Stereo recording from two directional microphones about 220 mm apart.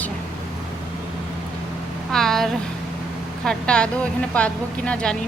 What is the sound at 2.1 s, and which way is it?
Speech, centre (ahead or behind).